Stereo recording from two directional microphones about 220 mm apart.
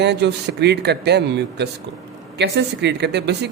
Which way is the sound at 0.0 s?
50° right (ahead or behind).